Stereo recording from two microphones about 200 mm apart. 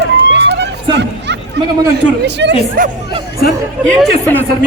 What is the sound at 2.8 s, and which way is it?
Speech, 45° right (ahead or behind).